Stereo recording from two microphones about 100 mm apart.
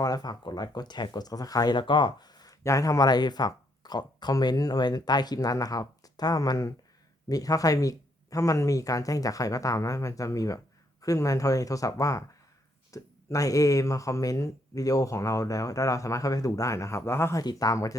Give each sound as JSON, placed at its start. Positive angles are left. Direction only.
{"t": 0.0, "sound": "speech", "side_deg": 40}
{"t": 17.4, "sound": "speech", "side_deg": 40}